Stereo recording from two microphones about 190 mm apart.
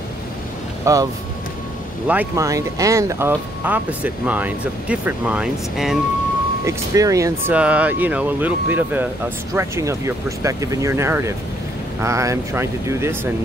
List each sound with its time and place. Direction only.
0.9 s speech: 15° right (ahead or behind)
2.0 s speech: 10° right (ahead or behind)
6.6 s speech: 15° right (ahead or behind)